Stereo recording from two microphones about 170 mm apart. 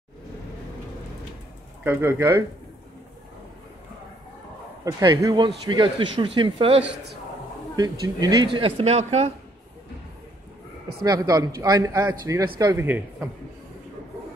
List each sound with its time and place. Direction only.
1.9 s a man's voice: 15° right (ahead or behind)
5.0 s a man's voice: 25° right (ahead or behind)
11.0 s a man's voice: 20° right (ahead or behind)